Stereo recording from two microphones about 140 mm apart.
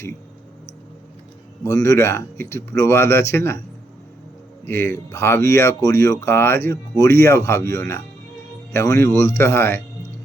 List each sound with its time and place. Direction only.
1.6 s speech: 20° left (ahead or behind)
4.6 s speech: 15° left (ahead or behind)